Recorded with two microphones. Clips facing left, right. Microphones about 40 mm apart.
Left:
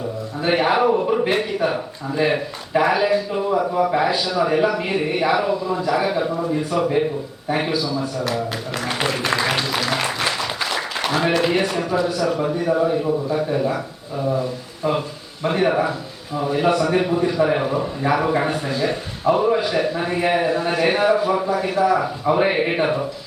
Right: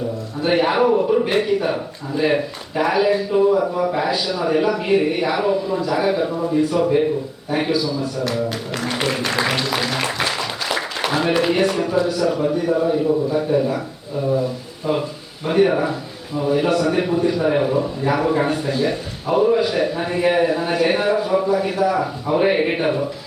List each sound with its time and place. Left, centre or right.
0.4 s a man's voice: centre
9.3 s applause: centre
12.1 s a man's voice: centre
15.4 s a man's voice: centre